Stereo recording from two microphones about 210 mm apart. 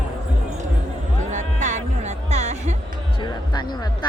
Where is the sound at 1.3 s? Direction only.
35° right (ahead or behind).